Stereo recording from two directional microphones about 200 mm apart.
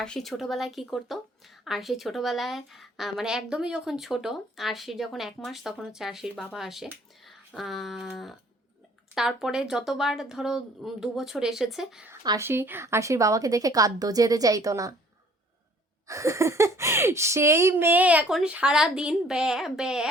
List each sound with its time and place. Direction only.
0.0 s speech: centre (ahead or behind)
12.2 s speech: 15° right (ahead or behind)
16.0 s speech: 15° right (ahead or behind)